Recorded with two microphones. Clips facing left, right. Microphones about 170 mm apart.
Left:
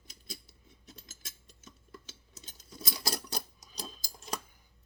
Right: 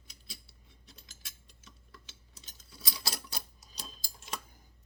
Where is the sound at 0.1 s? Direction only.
45° left (ahead or behind).